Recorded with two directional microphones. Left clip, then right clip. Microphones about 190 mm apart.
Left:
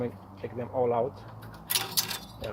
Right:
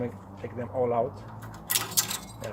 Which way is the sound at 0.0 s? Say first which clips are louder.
Even; 35° left (ahead or behind).